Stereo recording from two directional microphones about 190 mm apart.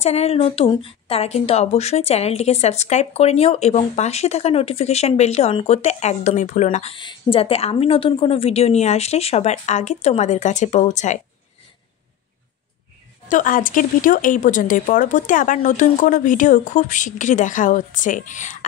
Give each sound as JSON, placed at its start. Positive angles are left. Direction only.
{"t": 0.0, "sound": "a woman's voice", "side_deg": 35}
{"t": 13.3, "sound": "speech", "side_deg": 45}